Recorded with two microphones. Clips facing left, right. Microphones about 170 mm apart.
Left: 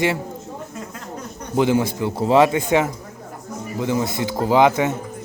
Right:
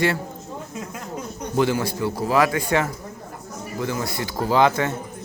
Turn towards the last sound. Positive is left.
turn(degrees=20)  # may be behind; listen again after turning